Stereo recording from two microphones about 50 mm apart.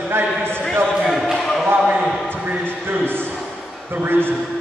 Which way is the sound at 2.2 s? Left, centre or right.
Right.